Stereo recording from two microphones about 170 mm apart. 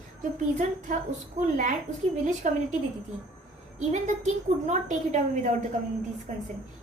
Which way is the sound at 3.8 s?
45° right (ahead or behind).